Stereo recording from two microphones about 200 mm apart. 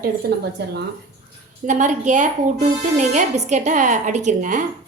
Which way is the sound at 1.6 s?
35° right (ahead or behind).